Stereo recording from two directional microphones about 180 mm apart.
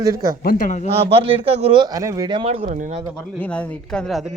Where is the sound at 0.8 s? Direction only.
35° right (ahead or behind).